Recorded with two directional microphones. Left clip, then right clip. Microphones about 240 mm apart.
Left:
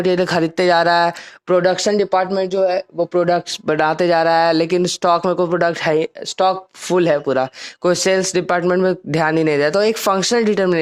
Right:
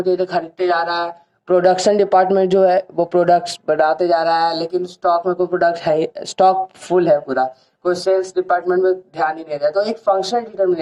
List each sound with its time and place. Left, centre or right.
0.0 s speech: left
1.5 s speech: centre; by 10.8 s left